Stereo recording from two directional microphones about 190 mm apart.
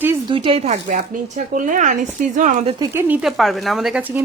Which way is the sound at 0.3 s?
30° right (ahead or behind).